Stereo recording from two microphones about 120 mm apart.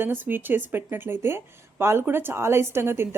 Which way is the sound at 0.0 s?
15° right (ahead or behind).